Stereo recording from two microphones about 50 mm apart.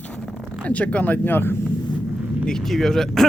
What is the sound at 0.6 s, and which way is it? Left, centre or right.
Speech, left.